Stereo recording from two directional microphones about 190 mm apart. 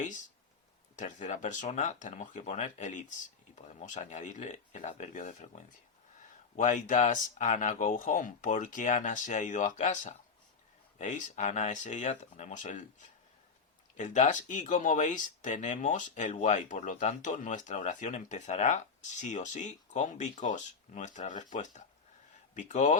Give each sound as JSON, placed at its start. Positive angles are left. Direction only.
{"t": 0.9, "sound": "speech", "side_deg": 40}
{"t": 13.9, "sound": "speech", "side_deg": 40}